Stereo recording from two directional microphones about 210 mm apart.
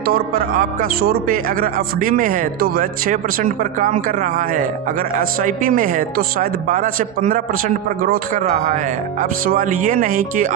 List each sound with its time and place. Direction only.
0.0 s speech: 45° right (ahead or behind)